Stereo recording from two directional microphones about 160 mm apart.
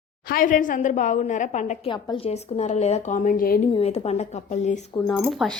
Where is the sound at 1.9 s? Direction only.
30° left (ahead or behind); by 3.6 s 65° left (ahead or behind).